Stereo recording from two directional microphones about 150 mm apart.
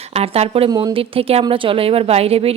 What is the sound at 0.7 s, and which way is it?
Speech, 30° right (ahead or behind).